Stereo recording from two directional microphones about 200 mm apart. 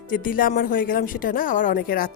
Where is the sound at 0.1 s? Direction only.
45° left (ahead or behind).